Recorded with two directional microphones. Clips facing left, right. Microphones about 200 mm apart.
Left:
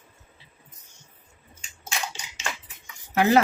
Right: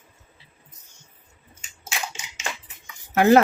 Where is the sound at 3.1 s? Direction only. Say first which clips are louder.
Right 5 dB; 50° right (ahead or behind).